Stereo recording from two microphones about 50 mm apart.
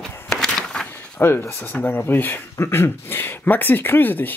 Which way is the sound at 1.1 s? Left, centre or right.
Left.